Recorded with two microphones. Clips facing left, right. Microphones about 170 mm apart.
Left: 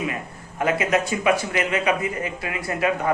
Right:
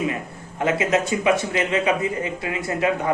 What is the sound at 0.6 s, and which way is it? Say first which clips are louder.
Speech: right 1 dB; 25° right (ahead or behind).